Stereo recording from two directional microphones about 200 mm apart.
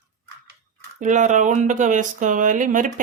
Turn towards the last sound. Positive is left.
turn(degrees=-40)  # may be behind; listen again after turning